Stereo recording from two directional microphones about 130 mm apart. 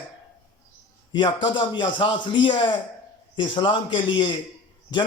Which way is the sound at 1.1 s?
35° left (ahead or behind).